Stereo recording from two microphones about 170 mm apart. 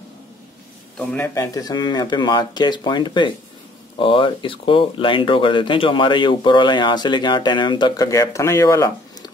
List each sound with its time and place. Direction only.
0.9 s speech: 10° left (ahead or behind)